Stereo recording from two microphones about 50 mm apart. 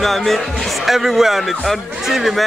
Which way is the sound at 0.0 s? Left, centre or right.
Centre.